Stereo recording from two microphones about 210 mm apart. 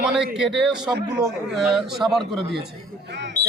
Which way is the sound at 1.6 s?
Centre (ahead or behind).